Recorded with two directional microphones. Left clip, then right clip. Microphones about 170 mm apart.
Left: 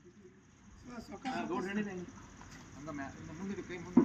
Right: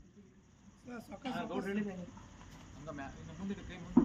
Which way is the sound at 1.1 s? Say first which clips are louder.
Left 1 dB; 60° right (ahead or behind).